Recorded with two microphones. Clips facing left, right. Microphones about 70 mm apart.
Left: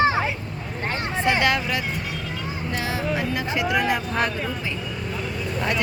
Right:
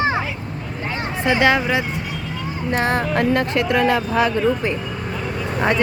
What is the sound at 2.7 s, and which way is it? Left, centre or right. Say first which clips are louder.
Music: right 7 dB; right.